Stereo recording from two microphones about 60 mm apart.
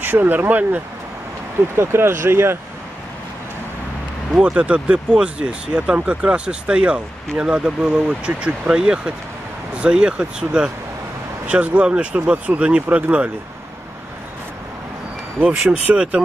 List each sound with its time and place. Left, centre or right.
0.0 s speech: right
1.8 s speech: right
4.3 s speech: centre
12.8 s speech: right
15.4 s speech: right